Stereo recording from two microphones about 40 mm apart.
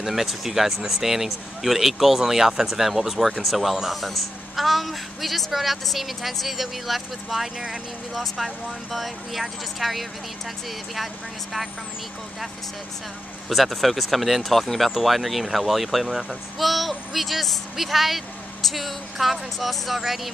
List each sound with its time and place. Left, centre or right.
0.0 s speech: centre
7.5 s speech: centre
8.1 s speech: centre
13.5 s speech: centre